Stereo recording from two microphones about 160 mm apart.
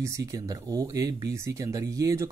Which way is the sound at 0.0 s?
20° right (ahead or behind).